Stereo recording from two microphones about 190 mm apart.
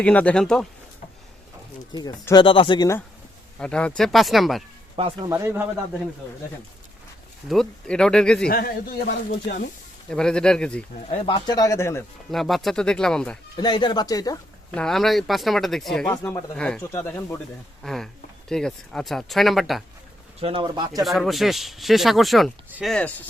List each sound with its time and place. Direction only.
0.0 s speech: 5° left (ahead or behind)
1.9 s speech: 20° left (ahead or behind)
3.6 s speech: 5° left (ahead or behind)
5.0 s speech: 30° right (ahead or behind)
5.3 s a man's voice: 15° right (ahead or behind)
7.4 s speech: centre (ahead or behind)
8.4 s speech: 50° left (ahead or behind)
10.1 s speech: 5° left (ahead or behind)
11.4 s speech: 20° left (ahead or behind)
12.3 s speech: centre (ahead or behind)
13.6 s speech: 25° left (ahead or behind)
14.7 s speech: 5° left (ahead or behind)
20.4 s speech: 25° right (ahead or behind)
21.0 s speech: centre (ahead or behind)